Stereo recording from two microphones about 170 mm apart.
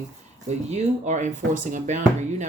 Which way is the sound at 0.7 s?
45° right (ahead or behind).